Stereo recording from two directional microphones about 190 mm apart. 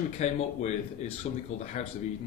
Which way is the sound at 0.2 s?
35° left (ahead or behind).